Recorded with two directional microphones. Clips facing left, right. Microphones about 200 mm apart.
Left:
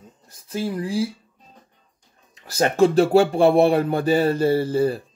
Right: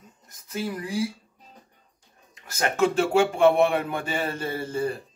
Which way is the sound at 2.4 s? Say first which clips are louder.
Left 6 dB; 35° left (ahead or behind).